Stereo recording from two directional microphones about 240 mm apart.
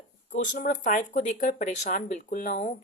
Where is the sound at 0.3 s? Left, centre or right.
Left.